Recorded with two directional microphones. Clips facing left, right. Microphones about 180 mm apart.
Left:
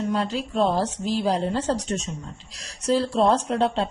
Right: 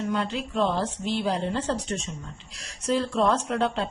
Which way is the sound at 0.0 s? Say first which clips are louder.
Left 3 dB; 35° left (ahead or behind).